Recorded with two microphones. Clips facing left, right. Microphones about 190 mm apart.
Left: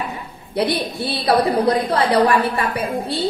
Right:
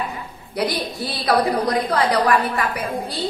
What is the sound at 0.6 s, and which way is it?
A woman's voice, 25° left (ahead or behind).